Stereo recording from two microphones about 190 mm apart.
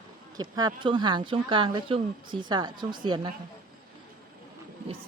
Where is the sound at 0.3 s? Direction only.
20° right (ahead or behind).